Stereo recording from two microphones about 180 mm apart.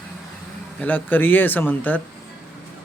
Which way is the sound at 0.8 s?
10° left (ahead or behind).